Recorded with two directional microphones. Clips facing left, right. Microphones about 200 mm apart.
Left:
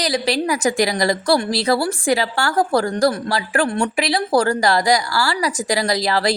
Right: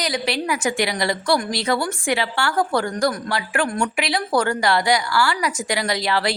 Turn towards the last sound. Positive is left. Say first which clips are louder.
# left 3 dB
turn(degrees=40)  # may be behind; listen again after turning